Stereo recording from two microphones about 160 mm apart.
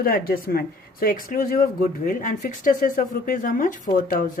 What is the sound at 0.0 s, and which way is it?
Speech, 65° left (ahead or behind).